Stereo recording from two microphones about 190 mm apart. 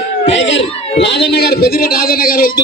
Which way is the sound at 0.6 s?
30° left (ahead or behind).